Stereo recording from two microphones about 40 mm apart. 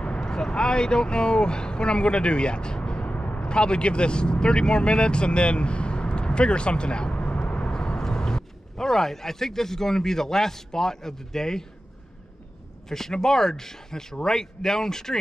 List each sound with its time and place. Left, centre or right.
0.2 s speech: centre; by 3.4 s left
3.4 s speech: left
7.4 s vehicle: left
7.7 s speech: centre
12.8 s speech: centre